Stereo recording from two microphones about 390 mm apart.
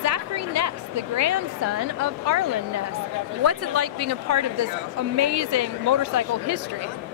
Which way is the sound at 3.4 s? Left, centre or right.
Right.